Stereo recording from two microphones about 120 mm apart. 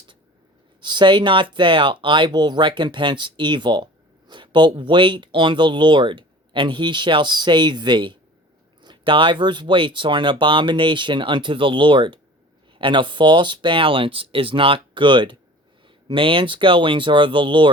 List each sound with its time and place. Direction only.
0.8 s speech: 40° right (ahead or behind)